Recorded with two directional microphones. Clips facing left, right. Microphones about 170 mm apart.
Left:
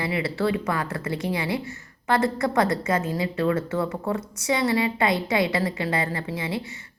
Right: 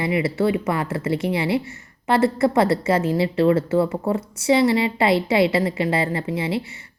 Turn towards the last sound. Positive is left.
turn(degrees=-25)  # may be behind; listen again after turning